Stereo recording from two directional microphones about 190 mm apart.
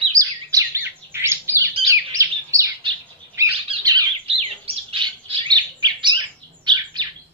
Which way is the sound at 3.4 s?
15° right (ahead or behind).